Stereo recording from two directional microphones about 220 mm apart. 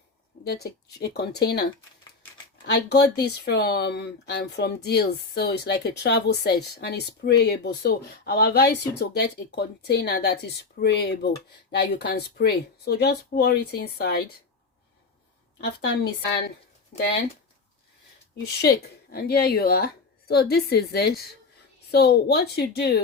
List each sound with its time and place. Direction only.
0.4 s speech: 45° left (ahead or behind)
2.6 s speech: 50° left (ahead or behind)
18.6 s speech: 45° left (ahead or behind)